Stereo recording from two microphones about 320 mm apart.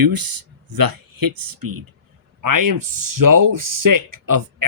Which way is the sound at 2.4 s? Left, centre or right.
Right.